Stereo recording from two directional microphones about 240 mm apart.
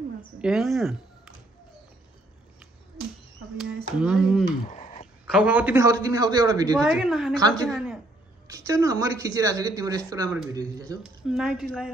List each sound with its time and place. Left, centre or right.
0.4 s speech: centre
3.5 s speech: centre
4.6 s a sound: left
5.3 s speech: centre
6.8 s speech: centre
7.3 s speech: centre
7.6 s a woman's voice: centre
8.5 s speech: centre
11.0 s speech: centre